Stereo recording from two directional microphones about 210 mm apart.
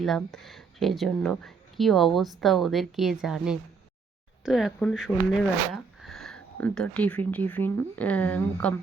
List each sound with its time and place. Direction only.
0.0 s speech: centre (ahead or behind)